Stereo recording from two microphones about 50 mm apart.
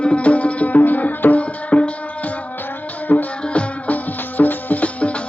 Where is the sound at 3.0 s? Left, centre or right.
Left.